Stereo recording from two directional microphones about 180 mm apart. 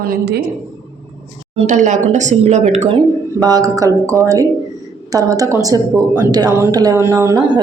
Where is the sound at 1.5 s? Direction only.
40° right (ahead or behind).